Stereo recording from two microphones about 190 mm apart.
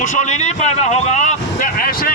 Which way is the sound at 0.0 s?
40° left (ahead or behind).